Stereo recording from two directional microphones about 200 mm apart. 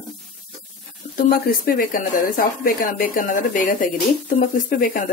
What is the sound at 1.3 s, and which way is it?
Speech, 45° left (ahead or behind).